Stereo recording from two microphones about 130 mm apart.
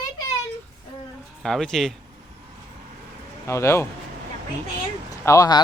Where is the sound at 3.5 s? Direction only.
20° left (ahead or behind).